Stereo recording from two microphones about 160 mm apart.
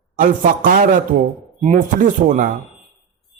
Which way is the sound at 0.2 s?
60° right (ahead or behind).